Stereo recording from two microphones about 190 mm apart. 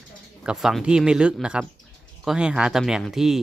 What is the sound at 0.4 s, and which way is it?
Speech, centre (ahead or behind).